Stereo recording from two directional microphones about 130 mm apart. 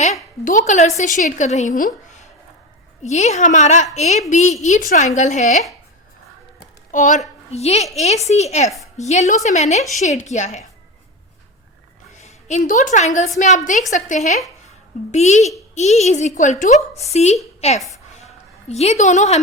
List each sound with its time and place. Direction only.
0.4 s a woman's voice: 75° left (ahead or behind)
6.9 s a woman's voice: 80° left
7.5 s a woman's voice: 55° left (ahead or behind)
12.2 s a woman's voice: 65° left (ahead or behind)